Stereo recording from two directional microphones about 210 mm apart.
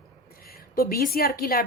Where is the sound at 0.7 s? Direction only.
45° left (ahead or behind).